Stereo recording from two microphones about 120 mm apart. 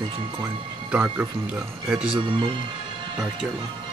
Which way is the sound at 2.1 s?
45° right (ahead or behind).